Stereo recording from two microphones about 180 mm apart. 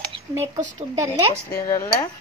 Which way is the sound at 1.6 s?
20° left (ahead or behind).